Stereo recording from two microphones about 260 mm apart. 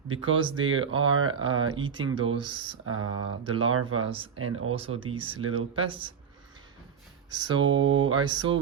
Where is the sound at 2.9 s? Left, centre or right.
Right.